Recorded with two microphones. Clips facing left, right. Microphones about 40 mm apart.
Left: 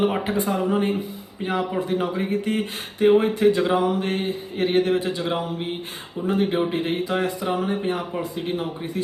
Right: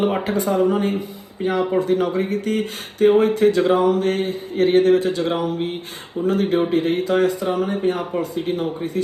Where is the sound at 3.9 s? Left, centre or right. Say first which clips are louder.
Right 4 dB; left.